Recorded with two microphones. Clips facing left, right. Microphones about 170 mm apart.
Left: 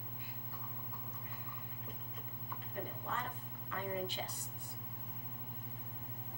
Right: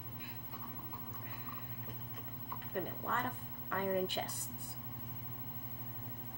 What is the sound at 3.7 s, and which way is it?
Speech, 55° right (ahead or behind).